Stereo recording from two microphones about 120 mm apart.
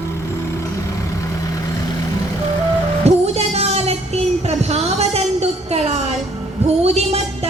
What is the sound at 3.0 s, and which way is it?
Music, 60° right (ahead or behind).